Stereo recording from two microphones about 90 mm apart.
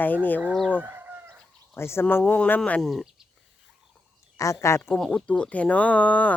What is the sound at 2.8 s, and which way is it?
Speech, centre (ahead or behind).